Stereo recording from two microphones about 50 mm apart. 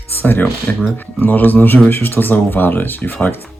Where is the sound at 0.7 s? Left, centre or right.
Left.